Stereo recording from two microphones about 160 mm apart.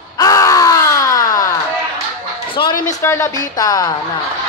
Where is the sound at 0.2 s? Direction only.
20° left (ahead or behind).